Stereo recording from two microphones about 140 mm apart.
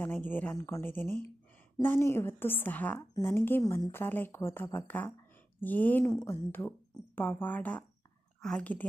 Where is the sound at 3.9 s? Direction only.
15° left (ahead or behind).